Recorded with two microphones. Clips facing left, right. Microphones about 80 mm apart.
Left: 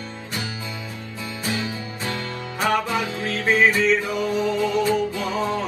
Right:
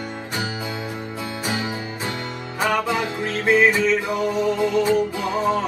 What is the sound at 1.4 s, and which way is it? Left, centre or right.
Music, right.